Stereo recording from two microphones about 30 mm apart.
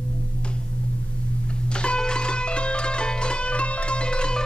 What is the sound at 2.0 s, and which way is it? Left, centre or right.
Music, left.